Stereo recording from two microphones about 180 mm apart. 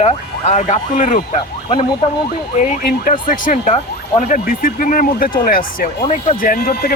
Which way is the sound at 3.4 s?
35° left (ahead or behind).